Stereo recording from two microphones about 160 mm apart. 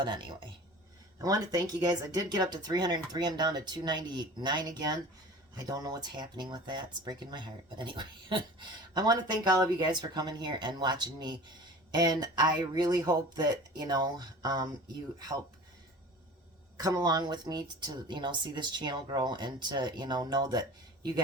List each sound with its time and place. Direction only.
1.2 s speech: 25° right (ahead or behind)
16.7 s speech: 25° right (ahead or behind)